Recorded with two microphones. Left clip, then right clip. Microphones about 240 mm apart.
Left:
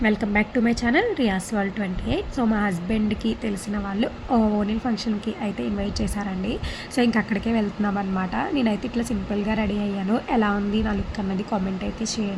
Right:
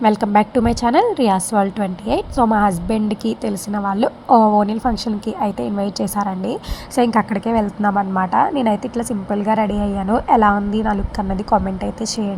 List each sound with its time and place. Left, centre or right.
0.0 s a woman's voice: right